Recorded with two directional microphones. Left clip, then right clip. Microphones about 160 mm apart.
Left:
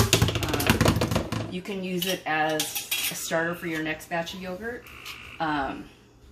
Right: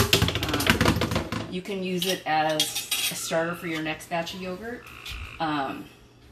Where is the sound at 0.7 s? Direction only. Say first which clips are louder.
Right 1 dB; 55° left (ahead or behind).